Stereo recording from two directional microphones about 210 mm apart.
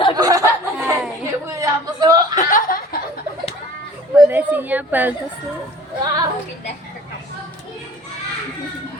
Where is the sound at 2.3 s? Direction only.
40° left (ahead or behind).